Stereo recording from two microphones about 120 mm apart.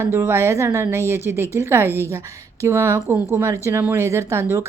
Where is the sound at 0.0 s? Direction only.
20° right (ahead or behind).